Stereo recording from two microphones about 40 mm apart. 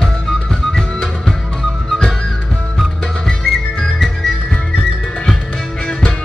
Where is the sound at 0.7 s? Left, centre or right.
Centre.